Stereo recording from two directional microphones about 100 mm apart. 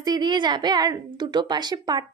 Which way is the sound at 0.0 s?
45° right (ahead or behind).